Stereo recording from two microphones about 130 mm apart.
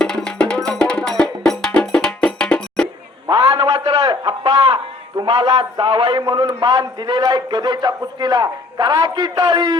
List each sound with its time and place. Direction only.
0.0 s music: 5° left (ahead or behind)
3.2 s a man's voice: 40° right (ahead or behind)